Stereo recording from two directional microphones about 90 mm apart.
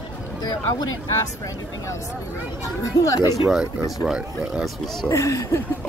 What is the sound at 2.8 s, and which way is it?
Speech, 40° left (ahead or behind).